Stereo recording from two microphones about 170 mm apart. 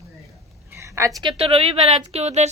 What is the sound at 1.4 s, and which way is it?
Speech, 35° right (ahead or behind).